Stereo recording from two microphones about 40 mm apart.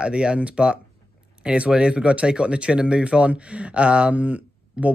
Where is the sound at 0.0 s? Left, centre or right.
Right.